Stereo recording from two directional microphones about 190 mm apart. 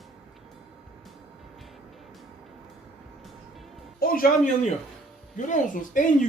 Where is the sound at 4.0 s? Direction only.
50° left (ahead or behind).